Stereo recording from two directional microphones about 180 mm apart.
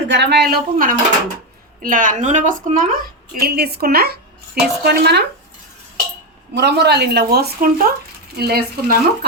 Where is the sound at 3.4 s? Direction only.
60° right (ahead or behind).